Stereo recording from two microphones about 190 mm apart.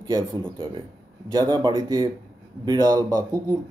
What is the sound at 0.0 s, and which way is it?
Speech, 20° right (ahead or behind).